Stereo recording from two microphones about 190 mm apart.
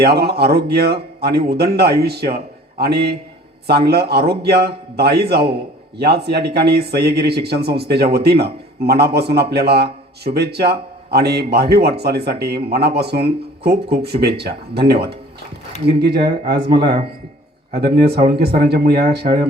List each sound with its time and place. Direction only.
0.0 s a man's voice: 55° right (ahead or behind)
17.7 s a man's voice: 55° right (ahead or behind)